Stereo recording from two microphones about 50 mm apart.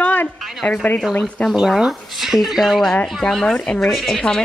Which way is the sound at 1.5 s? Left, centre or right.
Centre.